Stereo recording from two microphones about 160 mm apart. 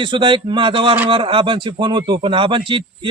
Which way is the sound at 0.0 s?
30° right (ahead or behind).